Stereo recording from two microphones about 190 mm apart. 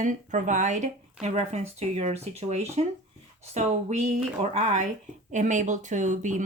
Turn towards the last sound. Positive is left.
turn(degrees=-40)  # may be behind; listen again after turning